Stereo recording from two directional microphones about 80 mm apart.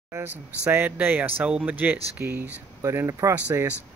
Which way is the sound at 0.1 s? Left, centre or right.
Right.